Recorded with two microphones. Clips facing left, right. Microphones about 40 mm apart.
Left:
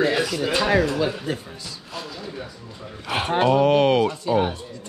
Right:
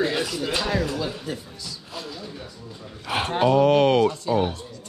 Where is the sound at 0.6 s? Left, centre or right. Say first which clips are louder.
Left 7 dB; centre.